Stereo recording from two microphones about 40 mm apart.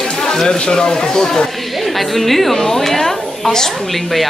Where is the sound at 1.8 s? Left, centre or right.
Centre.